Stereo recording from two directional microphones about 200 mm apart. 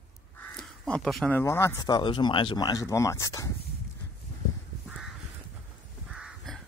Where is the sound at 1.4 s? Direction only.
15° left (ahead or behind).